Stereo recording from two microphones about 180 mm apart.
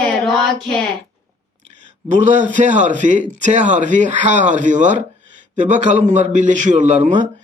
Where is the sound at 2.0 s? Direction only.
45° right (ahead or behind).